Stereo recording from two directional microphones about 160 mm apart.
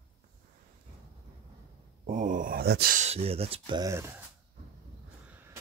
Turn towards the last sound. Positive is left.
turn(degrees=-15)  # may be behind; listen again after turning